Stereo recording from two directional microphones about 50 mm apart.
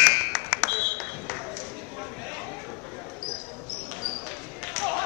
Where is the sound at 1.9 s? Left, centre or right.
Centre.